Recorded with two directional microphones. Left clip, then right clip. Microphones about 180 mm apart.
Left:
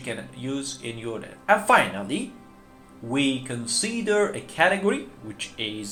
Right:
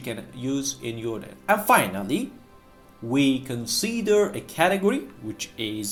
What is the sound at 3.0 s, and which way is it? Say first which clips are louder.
Speech: right 2 dB; 40° right (ahead or behind).